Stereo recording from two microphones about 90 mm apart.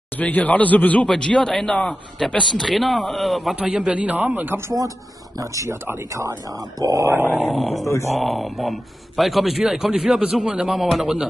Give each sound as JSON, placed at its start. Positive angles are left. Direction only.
{"t": 0.2, "sound": "a man's voice", "side_deg": 15}
{"t": 3.5, "sound": "speech", "side_deg": -10}
{"t": 5.4, "sound": "speech", "side_deg": -35}
{"t": 7.1, "sound": "speech", "side_deg": -20}
{"t": 7.5, "sound": "a man's voice", "side_deg": 0}